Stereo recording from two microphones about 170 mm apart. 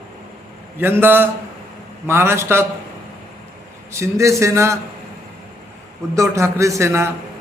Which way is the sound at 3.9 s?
15° right (ahead or behind).